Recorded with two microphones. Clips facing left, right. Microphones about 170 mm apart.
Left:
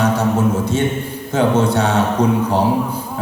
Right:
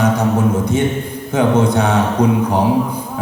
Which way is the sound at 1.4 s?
15° right (ahead or behind).